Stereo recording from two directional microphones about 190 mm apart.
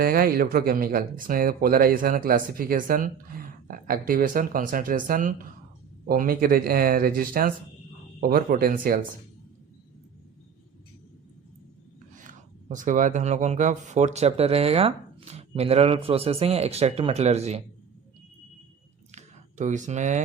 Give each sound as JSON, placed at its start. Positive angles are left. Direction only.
{"t": 0.0, "sound": "speech", "side_deg": -50}
{"t": 12.1, "sound": "speech", "side_deg": -40}
{"t": 19.1, "sound": "a sound", "side_deg": -40}